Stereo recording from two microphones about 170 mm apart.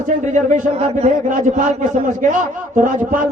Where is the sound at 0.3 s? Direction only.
45° right (ahead or behind).